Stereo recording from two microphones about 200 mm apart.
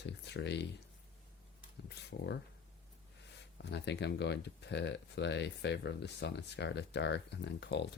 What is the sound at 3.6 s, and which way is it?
Speech, 60° left (ahead or behind).